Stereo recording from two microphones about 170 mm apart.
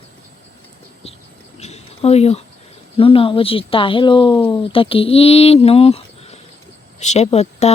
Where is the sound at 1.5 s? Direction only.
40° left (ahead or behind).